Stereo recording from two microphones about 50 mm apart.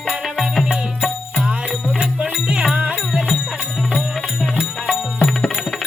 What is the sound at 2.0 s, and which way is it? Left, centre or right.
Music, right.